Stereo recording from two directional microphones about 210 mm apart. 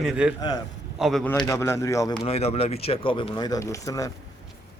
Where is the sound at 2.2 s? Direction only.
30° left (ahead or behind).